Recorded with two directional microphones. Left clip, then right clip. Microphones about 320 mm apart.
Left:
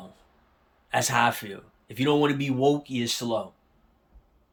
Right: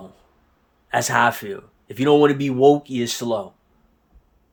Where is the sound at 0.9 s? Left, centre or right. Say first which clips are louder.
Right 5 dB; centre.